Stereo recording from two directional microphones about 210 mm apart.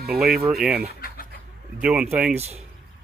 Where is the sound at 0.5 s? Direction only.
5° right (ahead or behind).